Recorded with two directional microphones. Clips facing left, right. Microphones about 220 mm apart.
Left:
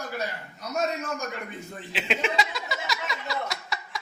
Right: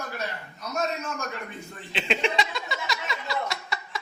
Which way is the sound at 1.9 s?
5° left (ahead or behind).